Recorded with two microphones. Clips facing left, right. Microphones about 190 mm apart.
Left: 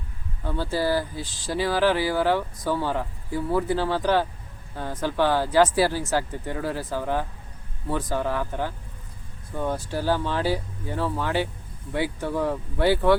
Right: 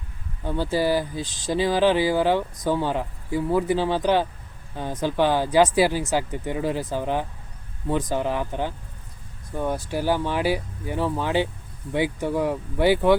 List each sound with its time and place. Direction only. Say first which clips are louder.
0.4 s speech: right 2 dB; 15° right (ahead or behind)